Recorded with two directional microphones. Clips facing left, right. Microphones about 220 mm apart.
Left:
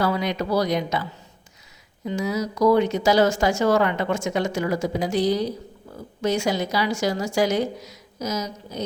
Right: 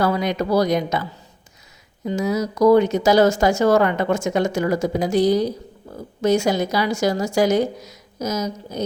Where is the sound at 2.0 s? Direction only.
45° right (ahead or behind).